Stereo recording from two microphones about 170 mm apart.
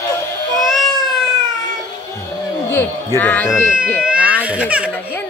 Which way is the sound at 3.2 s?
10° left (ahead or behind).